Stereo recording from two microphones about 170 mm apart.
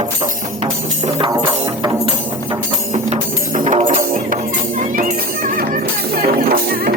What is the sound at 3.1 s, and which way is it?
Music, 45° right (ahead or behind).